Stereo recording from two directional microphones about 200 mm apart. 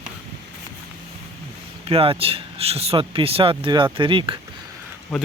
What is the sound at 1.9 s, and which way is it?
Speech, 30° right (ahead or behind).